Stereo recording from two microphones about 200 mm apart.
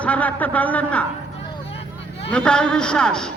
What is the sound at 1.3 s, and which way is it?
Vehicle, 30° left (ahead or behind).